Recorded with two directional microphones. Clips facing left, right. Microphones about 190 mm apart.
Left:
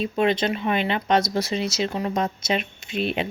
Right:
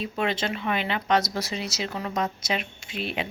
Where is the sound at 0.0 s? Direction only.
20° left (ahead or behind).